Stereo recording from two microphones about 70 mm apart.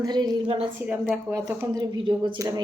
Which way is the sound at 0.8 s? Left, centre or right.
Right.